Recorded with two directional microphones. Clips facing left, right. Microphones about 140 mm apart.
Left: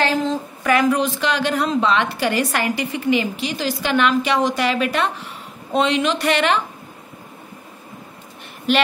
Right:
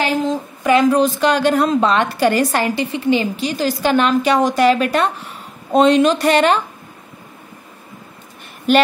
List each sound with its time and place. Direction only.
0.0 s a woman's voice: 15° right (ahead or behind); by 6.6 s 40° right (ahead or behind)